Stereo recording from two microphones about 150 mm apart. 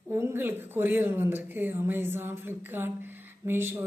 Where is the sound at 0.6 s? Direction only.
15° right (ahead or behind).